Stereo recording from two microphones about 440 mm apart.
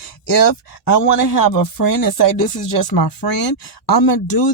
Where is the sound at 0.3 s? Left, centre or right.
Left.